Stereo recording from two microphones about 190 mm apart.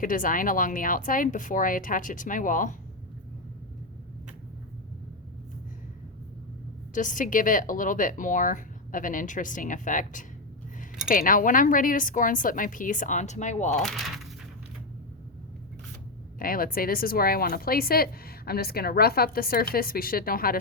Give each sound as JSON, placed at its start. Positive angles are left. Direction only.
{"t": 0.0, "sound": "speech", "side_deg": 45}
{"t": 6.9, "sound": "speech", "side_deg": 45}
{"t": 13.7, "sound": "speech", "side_deg": 5}
{"t": 16.4, "sound": "speech", "side_deg": 50}